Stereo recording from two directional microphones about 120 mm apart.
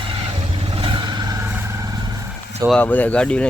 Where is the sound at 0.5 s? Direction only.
50° right (ahead or behind).